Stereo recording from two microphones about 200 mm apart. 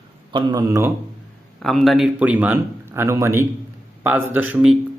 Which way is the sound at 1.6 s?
Centre (ahead or behind).